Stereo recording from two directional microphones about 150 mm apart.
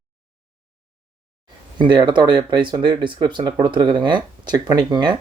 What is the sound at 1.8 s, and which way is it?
Speech, 30° right (ahead or behind).